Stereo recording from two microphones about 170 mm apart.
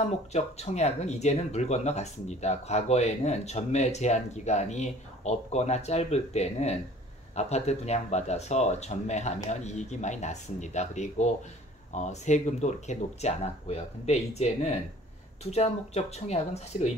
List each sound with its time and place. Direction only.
0.3 s speech: 40° left (ahead or behind)